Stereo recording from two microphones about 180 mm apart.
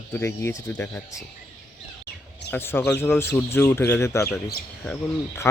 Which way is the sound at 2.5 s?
10° left (ahead or behind).